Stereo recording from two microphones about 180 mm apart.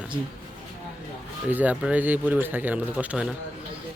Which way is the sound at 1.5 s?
10° right (ahead or behind).